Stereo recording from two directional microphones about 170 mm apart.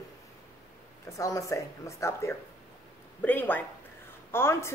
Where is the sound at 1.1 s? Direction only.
20° left (ahead or behind).